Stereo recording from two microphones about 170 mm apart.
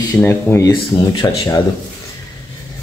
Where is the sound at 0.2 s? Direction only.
15° left (ahead or behind).